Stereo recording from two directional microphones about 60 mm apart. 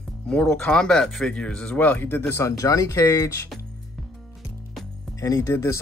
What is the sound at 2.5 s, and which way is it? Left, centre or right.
Speech, left.